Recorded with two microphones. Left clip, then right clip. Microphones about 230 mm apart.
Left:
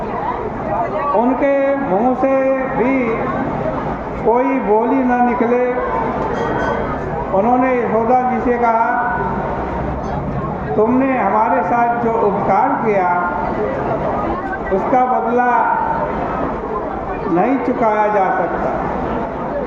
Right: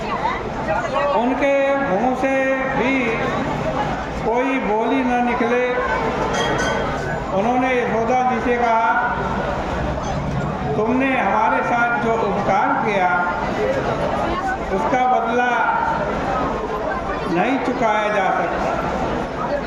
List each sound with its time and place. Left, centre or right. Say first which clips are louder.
1.4 s speech: left 2 dB; right
2.2 s a sound: left 4 dB; right
8.1 s speech: left 2 dB; right
12.5 s speech: left 3 dB; right
14.9 s speech: left 3 dB; right
17.4 s speech: left 3 dB; right